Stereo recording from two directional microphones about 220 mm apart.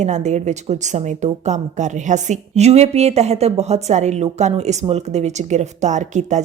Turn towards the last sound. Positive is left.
turn(degrees=-35)  # may be behind; listen again after turning